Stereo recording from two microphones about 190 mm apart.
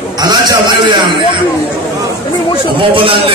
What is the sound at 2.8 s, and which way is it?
Speech, 25° right (ahead or behind).